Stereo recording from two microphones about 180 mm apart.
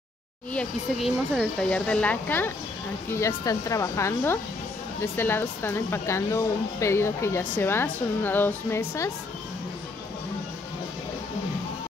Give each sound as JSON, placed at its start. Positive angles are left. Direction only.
{"t": 0.5, "sound": "speech", "side_deg": 5}